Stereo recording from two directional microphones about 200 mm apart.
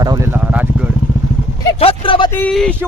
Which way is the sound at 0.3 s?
5° right (ahead or behind).